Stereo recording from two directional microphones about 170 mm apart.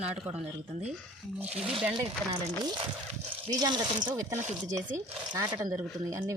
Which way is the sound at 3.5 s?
25° right (ahead or behind).